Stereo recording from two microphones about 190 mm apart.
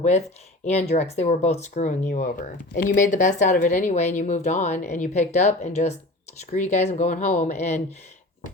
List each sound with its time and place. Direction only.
0.6 s speech: 35° left (ahead or behind)